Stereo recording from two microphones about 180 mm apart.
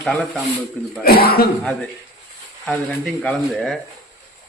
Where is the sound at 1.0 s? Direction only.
60° left (ahead or behind).